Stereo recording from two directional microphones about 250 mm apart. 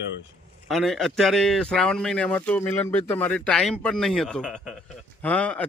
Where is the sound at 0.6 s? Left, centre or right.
Centre.